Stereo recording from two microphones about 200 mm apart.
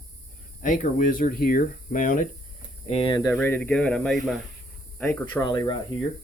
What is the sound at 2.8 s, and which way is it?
Speech, 30° left (ahead or behind).